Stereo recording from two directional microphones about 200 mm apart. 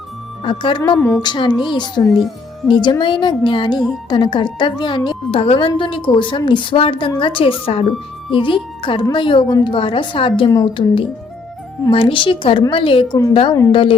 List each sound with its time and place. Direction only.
0.4 s a woman's voice: 25° left (ahead or behind)
2.0 s speech: centre (ahead or behind)
2.8 s a woman's voice: 25° left (ahead or behind)